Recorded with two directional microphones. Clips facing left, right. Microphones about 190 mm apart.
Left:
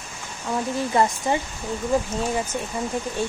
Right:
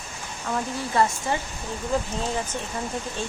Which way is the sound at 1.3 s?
20° left (ahead or behind).